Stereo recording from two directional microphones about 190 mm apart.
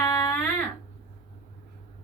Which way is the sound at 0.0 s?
20° left (ahead or behind).